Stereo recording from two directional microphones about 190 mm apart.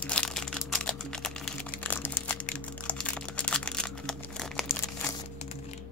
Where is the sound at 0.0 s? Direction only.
5° left (ahead or behind).